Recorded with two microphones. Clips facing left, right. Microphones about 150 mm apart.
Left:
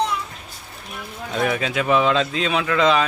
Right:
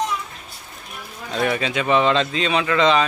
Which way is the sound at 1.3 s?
Centre (ahead or behind).